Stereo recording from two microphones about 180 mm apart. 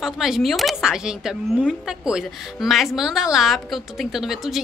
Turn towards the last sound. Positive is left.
turn(degrees=0)  # may be behind; listen again after turning